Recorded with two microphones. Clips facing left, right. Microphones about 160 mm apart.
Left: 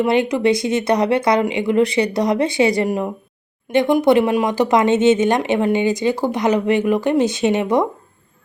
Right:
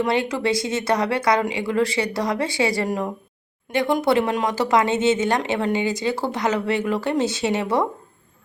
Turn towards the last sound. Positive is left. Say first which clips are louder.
# left 5 dB
turn(degrees=15)  # may be behind; listen again after turning